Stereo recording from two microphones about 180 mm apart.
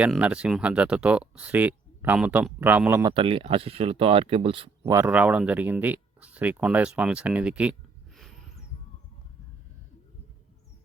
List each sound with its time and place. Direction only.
0.0 s speech: 5° right (ahead or behind)
3.0 s speech: 25° right (ahead or behind)
4.8 s speech: 15° right (ahead or behind)